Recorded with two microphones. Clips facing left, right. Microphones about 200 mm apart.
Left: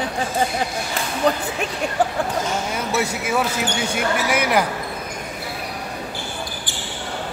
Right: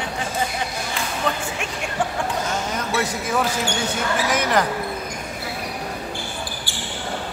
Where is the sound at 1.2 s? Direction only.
35° left (ahead or behind).